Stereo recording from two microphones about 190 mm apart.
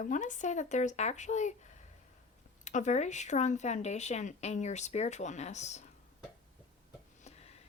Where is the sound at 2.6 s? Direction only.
40° left (ahead or behind).